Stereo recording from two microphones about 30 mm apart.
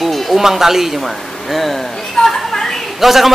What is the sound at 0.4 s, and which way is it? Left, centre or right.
A man's voice, centre.